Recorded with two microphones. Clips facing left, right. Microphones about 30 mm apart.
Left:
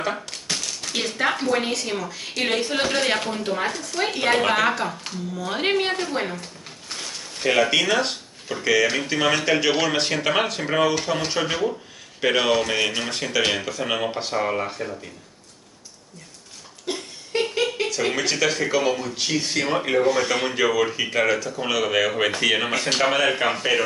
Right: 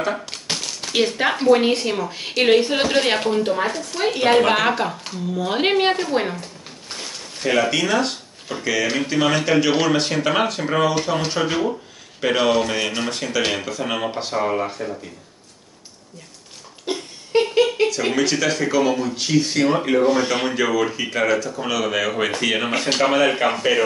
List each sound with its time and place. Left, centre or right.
0.3 s a sound: right
0.9 s speech: centre
5.9 s speech: centre
7.0 s a sound: centre
7.4 s speech: centre
16.9 s a sound: centre
18.1 s speech: centre
20.1 s speech: centre
20.5 s speech: centre
22.7 s speech: centre
22.9 s speech: centre